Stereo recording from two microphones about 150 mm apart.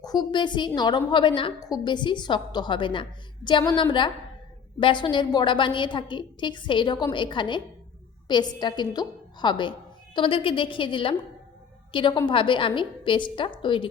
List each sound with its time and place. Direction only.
0.0 s a woman's voice: 25° left (ahead or behind)